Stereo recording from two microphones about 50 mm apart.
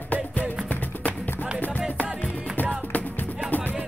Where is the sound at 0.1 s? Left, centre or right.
Left.